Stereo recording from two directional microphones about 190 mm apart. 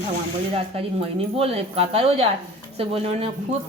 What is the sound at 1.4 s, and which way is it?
Speech, 30° right (ahead or behind).